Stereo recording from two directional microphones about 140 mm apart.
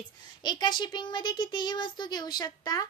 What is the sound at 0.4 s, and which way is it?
Speech, 30° left (ahead or behind).